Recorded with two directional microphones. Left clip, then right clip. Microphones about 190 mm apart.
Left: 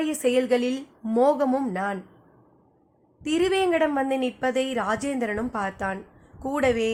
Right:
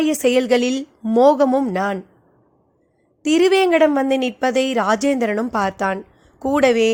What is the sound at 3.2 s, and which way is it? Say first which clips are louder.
A woman's voice: right 8 dB; 40° right (ahead or behind).